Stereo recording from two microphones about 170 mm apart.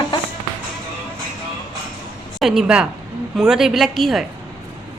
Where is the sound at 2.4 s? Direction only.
5° right (ahead or behind).